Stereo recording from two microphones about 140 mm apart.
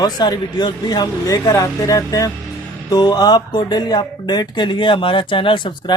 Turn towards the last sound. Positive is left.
turn(degrees=35)  # may be behind; listen again after turning